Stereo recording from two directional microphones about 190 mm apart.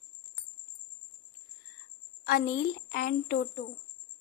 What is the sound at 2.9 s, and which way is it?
Speech, 50° left (ahead or behind).